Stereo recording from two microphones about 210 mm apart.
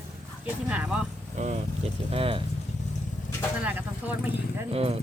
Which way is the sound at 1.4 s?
30° right (ahead or behind).